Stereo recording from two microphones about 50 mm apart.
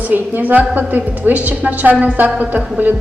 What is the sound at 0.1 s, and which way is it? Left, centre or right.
A woman's voice, right.